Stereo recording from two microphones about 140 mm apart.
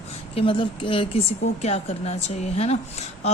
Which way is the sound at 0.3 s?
40° left (ahead or behind).